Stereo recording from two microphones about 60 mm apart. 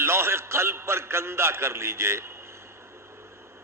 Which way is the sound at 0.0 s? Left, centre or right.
Right.